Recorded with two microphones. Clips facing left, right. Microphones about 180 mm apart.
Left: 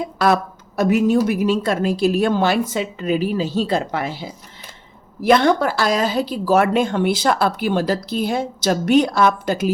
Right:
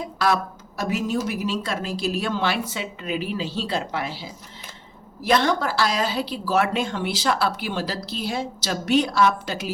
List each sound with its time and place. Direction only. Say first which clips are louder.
0.8 s speech: left 9 dB; 60° left (ahead or behind)